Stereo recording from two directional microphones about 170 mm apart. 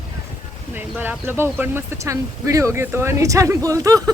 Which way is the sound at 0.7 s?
10° right (ahead or behind).